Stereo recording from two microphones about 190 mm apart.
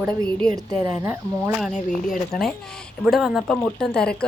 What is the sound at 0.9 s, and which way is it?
Speech, 10° right (ahead or behind).